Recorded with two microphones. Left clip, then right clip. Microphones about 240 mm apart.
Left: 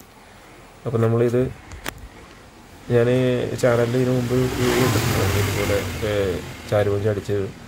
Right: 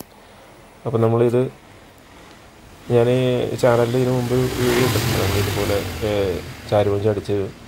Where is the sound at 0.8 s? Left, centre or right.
Centre.